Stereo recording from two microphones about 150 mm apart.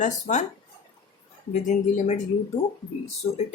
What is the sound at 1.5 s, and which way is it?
Speech, 50° left (ahead or behind).